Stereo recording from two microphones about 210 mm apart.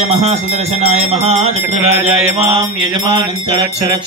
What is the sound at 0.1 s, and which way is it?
Music, 30° right (ahead or behind).